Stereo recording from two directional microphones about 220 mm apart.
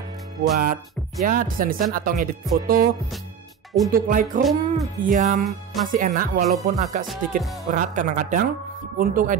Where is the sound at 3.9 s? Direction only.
40° right (ahead or behind).